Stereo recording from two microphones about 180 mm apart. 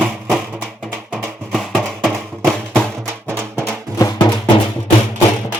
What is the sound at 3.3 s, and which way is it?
Music, 15° right (ahead or behind).